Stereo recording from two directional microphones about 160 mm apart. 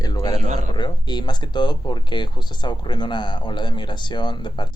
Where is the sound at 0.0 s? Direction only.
25° left (ahead or behind).